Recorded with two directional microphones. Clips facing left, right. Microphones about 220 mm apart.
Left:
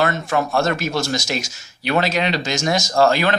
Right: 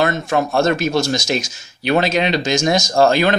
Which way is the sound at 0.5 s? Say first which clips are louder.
Right 4 dB; 20° right (ahead or behind).